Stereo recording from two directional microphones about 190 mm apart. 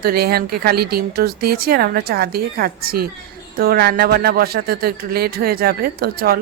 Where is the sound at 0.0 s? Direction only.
55° right (ahead or behind).